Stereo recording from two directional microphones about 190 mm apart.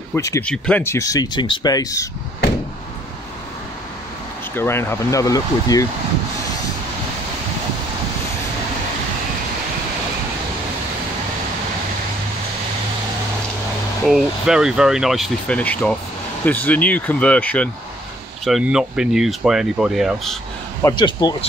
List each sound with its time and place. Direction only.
0.1 s speech: 15° left (ahead or behind)
4.6 s speech: 15° left (ahead or behind)
14.0 s speech: centre (ahead or behind)
20.8 s speech: 25° left (ahead or behind)